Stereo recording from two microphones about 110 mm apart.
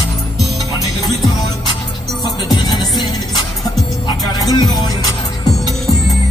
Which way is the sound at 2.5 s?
40° left (ahead or behind).